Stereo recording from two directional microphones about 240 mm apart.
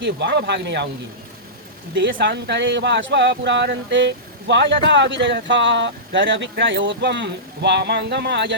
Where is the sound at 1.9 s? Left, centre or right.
Right.